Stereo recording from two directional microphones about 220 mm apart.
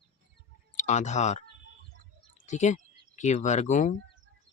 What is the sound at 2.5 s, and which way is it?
Speech, 35° left (ahead or behind).